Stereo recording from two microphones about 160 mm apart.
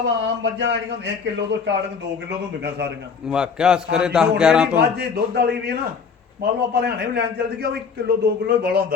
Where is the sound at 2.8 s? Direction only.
90° right.